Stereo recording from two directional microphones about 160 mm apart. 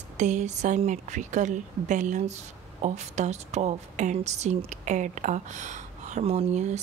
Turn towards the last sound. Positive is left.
turn(degrees=-45)  # may be behind; listen again after turning